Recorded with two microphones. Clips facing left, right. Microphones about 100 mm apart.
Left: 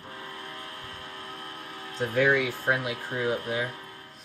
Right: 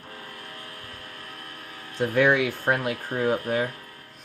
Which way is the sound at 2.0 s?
75° right (ahead or behind).